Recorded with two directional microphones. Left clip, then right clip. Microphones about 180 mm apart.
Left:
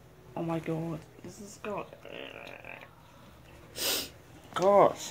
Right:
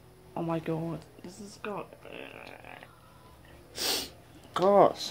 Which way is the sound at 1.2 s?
5° right (ahead or behind).